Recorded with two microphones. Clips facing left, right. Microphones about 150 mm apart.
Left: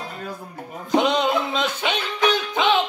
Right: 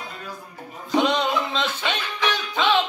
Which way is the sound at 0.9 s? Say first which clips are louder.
Left 2 dB; 15° left (ahead or behind).